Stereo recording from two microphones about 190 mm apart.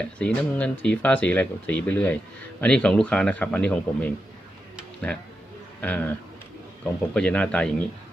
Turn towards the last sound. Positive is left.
turn(degrees=5)  # may be behind; listen again after turning